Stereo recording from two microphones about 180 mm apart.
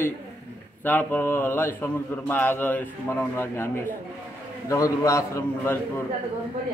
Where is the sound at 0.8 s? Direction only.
10° left (ahead or behind).